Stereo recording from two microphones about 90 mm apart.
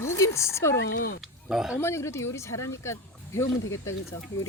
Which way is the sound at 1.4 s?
10° right (ahead or behind).